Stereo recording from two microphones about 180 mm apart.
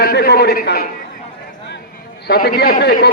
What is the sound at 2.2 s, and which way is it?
Speech, 55° left (ahead or behind).